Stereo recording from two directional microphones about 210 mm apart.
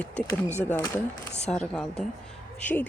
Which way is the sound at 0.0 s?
5° left (ahead or behind).